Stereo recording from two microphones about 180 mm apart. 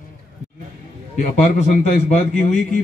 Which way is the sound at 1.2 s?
40° left (ahead or behind).